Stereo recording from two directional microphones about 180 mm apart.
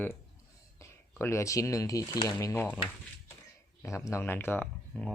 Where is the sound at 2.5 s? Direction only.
10° left (ahead or behind).